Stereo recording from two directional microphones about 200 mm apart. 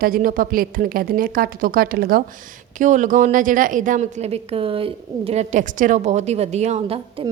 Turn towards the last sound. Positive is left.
turn(degrees=-30)  # may be behind; listen again after turning